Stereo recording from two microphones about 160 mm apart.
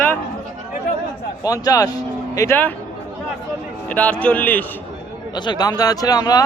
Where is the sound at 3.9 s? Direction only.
5° left (ahead or behind).